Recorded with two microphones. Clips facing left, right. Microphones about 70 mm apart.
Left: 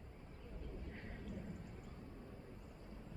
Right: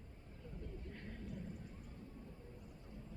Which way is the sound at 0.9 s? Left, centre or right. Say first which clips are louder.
Even; centre.